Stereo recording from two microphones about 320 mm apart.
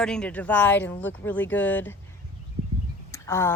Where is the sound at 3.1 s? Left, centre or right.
Centre.